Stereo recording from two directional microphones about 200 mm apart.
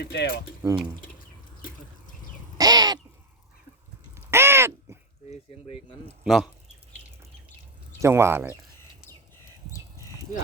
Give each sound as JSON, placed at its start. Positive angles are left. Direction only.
{"t": 0.0, "sound": "speech", "side_deg": 55}
{"t": 0.6, "sound": "speech", "side_deg": -15}
{"t": 2.6, "sound": "crow", "side_deg": -20}
{"t": 4.1, "sound": "crow", "side_deg": -10}
{"t": 5.3, "sound": "speech", "side_deg": 30}
{"t": 6.2, "sound": "speech", "side_deg": 0}
{"t": 8.0, "sound": "speech", "side_deg": -15}